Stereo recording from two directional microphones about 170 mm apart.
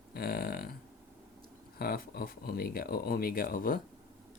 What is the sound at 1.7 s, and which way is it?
Speech, 60° left (ahead or behind).